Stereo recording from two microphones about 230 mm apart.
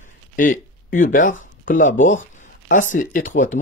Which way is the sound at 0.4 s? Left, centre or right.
Left.